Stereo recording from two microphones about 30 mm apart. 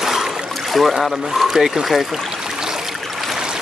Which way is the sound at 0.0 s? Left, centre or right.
Centre.